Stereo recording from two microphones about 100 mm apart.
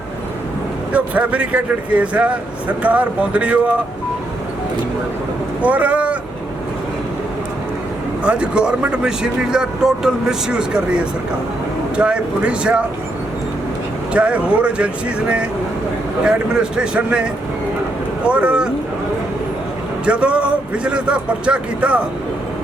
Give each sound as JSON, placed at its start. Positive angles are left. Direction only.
{"t": 0.9, "sound": "speech", "side_deg": -15}
{"t": 5.6, "sound": "speech", "side_deg": -15}
{"t": 8.2, "sound": "speech", "side_deg": -10}
{"t": 14.1, "sound": "speech", "side_deg": -10}
{"t": 16.2, "sound": "speech", "side_deg": -10}
{"t": 18.3, "sound": "speech", "side_deg": -10}
{"t": 20.1, "sound": "speech", "side_deg": -10}